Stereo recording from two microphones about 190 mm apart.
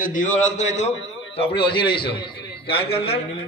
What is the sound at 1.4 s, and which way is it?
A man's voice, 25° left (ahead or behind).